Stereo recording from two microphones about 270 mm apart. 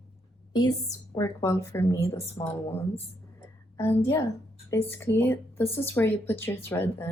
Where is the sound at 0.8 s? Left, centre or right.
Centre.